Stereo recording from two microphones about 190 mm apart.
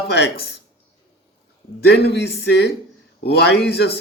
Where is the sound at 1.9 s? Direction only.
60° left (ahead or behind).